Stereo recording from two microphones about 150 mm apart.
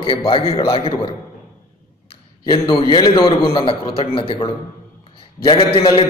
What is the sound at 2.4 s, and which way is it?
A man's voice, 35° left (ahead or behind).